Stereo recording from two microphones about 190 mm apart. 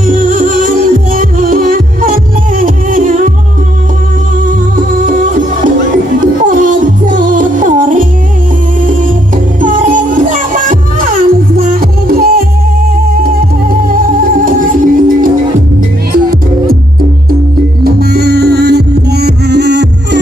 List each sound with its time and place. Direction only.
0.0 s music: 45° right (ahead or behind)
4.5 s music: 45° right (ahead or behind)
9.6 s music: 45° right (ahead or behind)
14.4 s music: 45° right (ahead or behind)
17.9 s music: 55° right (ahead or behind)